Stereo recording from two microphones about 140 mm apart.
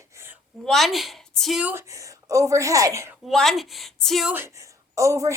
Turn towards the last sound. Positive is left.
turn(degrees=-20)  # may be behind; listen again after turning